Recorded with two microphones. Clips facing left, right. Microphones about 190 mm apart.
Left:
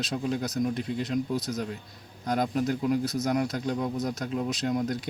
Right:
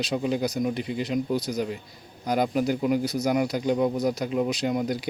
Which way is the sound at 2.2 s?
5° right (ahead or behind).